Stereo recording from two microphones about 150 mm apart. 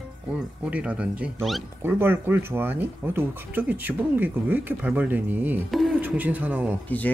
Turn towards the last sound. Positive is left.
turn(degrees=10)  # may be behind; listen again after turning